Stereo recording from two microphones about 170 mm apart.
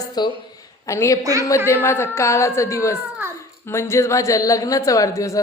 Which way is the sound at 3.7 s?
15° left (ahead or behind).